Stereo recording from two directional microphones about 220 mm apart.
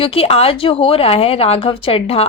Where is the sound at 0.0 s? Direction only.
25° left (ahead or behind).